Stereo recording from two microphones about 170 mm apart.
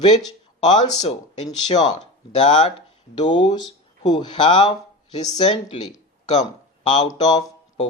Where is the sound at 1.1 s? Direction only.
40° left (ahead or behind).